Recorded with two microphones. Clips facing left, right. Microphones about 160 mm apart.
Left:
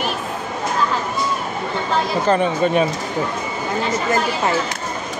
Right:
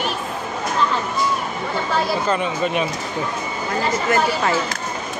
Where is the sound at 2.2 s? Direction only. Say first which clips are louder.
Left 4 dB; 35° left (ahead or behind).